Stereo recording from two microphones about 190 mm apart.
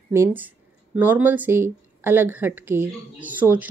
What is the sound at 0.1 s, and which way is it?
Speech, 10° right (ahead or behind).